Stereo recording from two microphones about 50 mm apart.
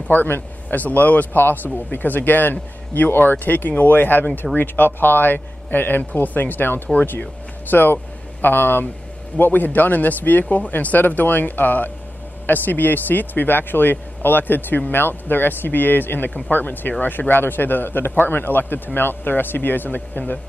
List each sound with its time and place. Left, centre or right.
0.1 s a man's voice: left